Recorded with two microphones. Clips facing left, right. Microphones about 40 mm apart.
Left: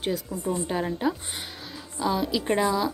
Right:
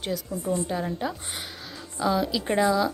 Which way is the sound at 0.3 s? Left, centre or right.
Centre.